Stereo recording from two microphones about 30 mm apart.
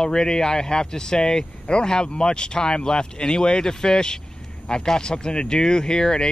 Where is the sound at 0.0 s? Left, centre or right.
Centre.